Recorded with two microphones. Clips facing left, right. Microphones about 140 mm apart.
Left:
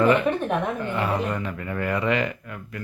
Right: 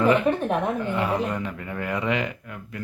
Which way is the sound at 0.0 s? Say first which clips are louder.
Even; 10° right (ahead or behind).